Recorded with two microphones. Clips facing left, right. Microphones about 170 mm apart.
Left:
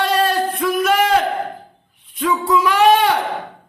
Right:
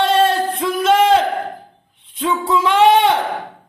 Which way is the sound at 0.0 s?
25° right (ahead or behind).